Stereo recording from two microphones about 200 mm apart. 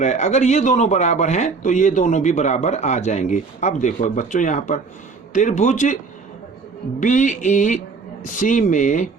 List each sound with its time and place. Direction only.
0.0 s a man's voice: 35° left (ahead or behind)
7.0 s a man's voice: 40° left (ahead or behind)